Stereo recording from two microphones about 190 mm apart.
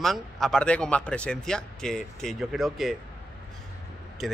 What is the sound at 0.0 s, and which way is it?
Speech, centre (ahead or behind).